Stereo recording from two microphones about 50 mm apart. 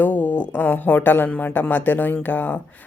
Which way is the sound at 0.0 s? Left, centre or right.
Left.